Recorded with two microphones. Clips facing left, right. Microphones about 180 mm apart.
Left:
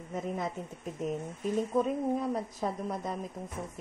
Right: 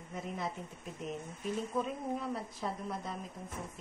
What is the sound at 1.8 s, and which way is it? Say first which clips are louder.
A woman's voice: left 7 dB; 40° left (ahead or behind).